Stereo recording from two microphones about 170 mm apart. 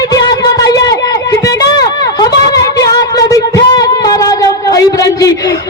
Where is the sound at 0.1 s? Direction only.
20° left (ahead or behind).